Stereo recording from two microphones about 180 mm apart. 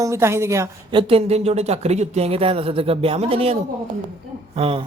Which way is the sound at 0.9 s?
30° right (ahead or behind).